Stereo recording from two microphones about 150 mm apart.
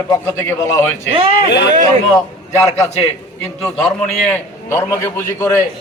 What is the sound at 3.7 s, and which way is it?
A man's voice, 5° left (ahead or behind).